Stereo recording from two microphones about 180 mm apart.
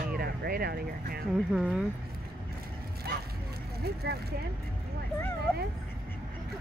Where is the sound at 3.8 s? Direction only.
60° right (ahead or behind).